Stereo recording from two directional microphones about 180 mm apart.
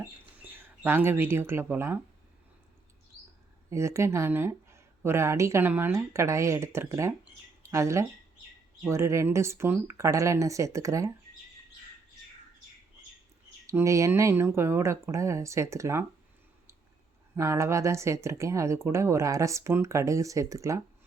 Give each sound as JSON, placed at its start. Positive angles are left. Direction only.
{"t": 0.6, "sound": "speech", "side_deg": -10}
{"t": 3.7, "sound": "speech", "side_deg": -15}
{"t": 13.7, "sound": "speech", "side_deg": -15}
{"t": 17.3, "sound": "speech", "side_deg": -15}